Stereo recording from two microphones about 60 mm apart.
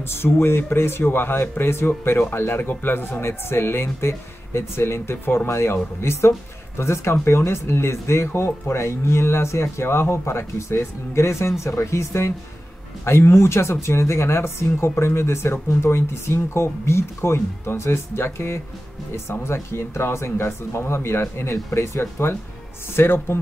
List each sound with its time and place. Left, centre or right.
0.1 s speech: left
21.6 s speech: left